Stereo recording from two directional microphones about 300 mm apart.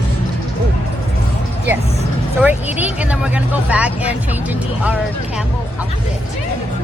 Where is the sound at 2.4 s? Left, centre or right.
Centre.